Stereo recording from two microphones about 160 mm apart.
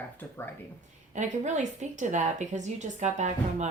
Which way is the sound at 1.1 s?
50° right (ahead or behind).